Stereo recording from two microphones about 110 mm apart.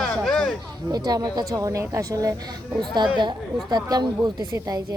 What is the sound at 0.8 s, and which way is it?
A woman's voice, 35° right (ahead or behind).